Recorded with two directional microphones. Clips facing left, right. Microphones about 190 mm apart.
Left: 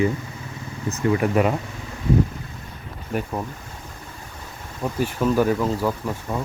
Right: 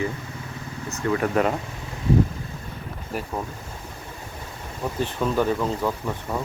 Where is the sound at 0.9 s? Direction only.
5° left (ahead or behind).